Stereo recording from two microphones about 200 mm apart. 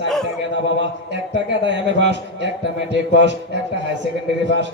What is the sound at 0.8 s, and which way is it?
Speech, 60° right (ahead or behind).